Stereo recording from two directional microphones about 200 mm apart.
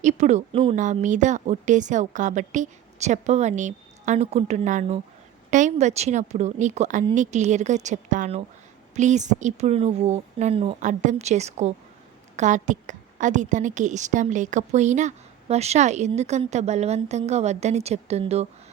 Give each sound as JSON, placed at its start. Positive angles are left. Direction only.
{"t": 0.0, "sound": "a woman's voice", "side_deg": -35}